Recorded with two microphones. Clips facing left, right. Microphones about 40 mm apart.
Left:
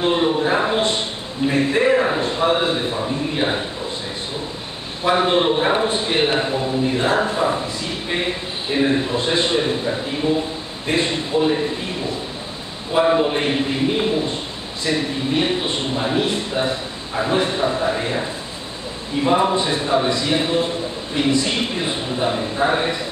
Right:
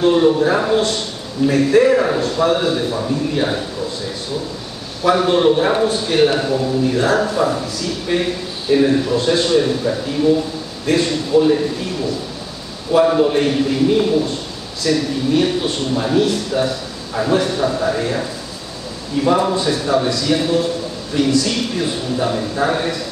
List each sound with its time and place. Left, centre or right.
0.0 s a man's voice: left
5.0 s a man's voice: left
11.3 s a man's voice: centre